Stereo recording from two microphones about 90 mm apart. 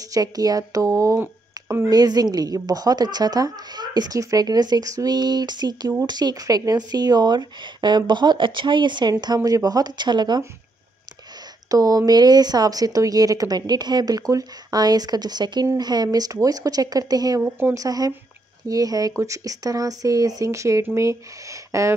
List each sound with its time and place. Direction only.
0.0 s speech: 40° right (ahead or behind)
9.2 s speech: 45° right (ahead or behind)
11.7 s speech: 40° right (ahead or behind)